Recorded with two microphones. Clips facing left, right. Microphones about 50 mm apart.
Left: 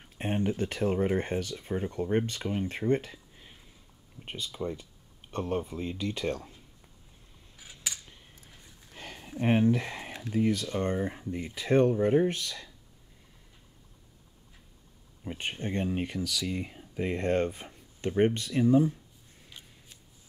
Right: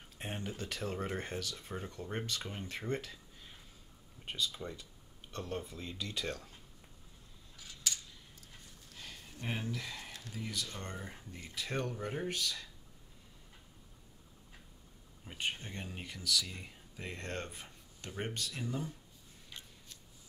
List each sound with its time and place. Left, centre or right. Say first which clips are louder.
0.2 s speech: left 12 dB; left
2.9 s a sound: left 10 dB; left
4.2 s speech: left 4 dB; left
7.5 s scissors: left 1 dB; centre
8.9 s a sound: left 10 dB; left
10.1 s speech: left 18 dB; left
15.3 s speech: left 7 dB; left
19.6 s scissors: left 1 dB; centre